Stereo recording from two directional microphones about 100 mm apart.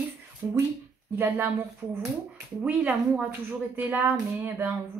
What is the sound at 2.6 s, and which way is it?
A woman's voice, 15° right (ahead or behind).